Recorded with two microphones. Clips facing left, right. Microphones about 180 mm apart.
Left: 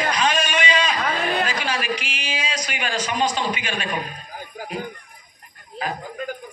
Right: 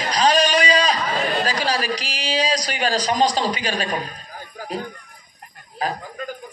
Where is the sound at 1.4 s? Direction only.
35° right (ahead or behind).